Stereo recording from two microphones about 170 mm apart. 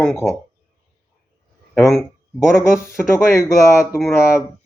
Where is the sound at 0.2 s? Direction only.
15° left (ahead or behind).